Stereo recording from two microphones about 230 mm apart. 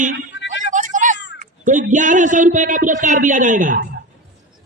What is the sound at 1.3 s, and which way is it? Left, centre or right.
A man's voice, right.